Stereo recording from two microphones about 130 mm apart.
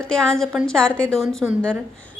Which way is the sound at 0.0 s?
5° left (ahead or behind).